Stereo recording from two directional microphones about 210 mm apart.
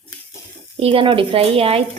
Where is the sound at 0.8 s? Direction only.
25° right (ahead or behind).